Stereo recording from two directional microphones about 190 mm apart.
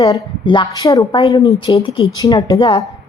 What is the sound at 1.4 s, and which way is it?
Speech, 30° left (ahead or behind).